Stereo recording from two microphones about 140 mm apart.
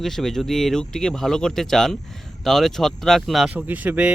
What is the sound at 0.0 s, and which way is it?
Speech, centre (ahead or behind).